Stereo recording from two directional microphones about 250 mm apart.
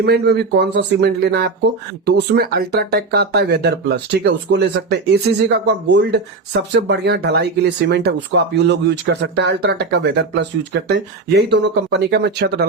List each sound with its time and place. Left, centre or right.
0.0 s speech: right